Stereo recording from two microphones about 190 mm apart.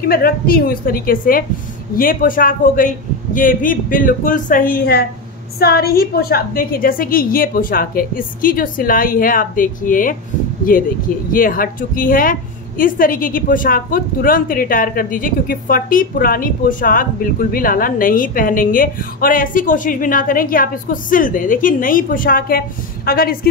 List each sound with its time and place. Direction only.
0.0 s a woman's voice: 55° left (ahead or behind)